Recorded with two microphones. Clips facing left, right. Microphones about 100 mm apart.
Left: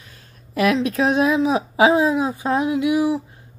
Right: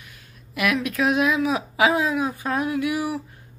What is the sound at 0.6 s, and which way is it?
Speech, 30° left (ahead or behind).